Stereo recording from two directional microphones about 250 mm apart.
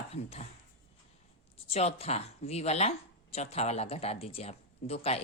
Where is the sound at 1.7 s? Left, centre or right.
Left.